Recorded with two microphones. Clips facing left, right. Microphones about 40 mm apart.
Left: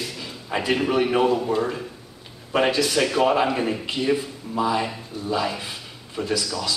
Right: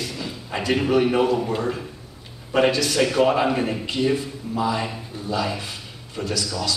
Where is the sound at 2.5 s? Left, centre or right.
Centre.